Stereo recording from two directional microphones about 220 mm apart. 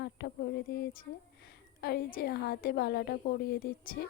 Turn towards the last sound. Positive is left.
turn(degrees=40)  # may be behind; listen again after turning